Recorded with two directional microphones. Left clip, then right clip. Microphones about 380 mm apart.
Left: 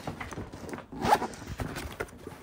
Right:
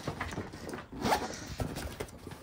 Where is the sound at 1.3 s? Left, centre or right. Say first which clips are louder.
Left 1 dB; centre.